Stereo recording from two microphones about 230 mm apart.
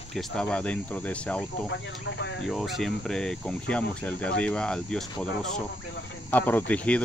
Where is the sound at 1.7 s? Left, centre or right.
Left.